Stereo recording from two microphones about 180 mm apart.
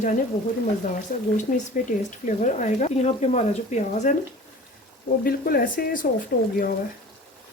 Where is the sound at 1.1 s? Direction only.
50° left (ahead or behind).